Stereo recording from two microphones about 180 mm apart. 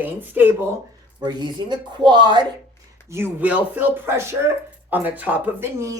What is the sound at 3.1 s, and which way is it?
Speech, 10° right (ahead or behind).